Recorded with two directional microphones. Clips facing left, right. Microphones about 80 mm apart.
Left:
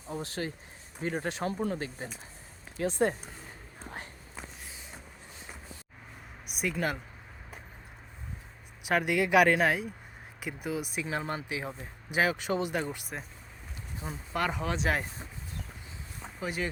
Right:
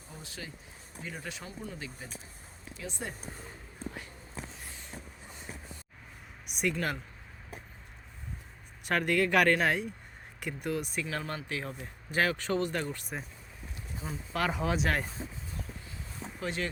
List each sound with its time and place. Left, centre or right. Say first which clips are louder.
0.1 s speech: left 10 dB; left
4.6 s a sound: right 1 dB; centre
6.5 s speech: even; centre
8.9 s speech: left 2 dB; centre
11.0 s speech: left 3 dB; left; by 14.8 s centre
16.4 s speech: left 1 dB; centre